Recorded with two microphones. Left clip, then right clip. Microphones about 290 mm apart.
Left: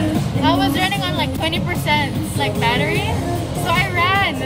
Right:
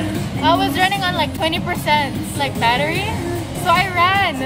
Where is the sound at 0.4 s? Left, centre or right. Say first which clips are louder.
Right 2 dB; centre.